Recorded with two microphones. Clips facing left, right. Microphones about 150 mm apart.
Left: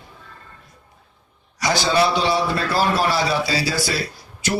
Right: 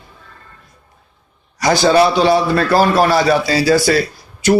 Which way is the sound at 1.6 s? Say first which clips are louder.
Right 7 dB; 50° right (ahead or behind).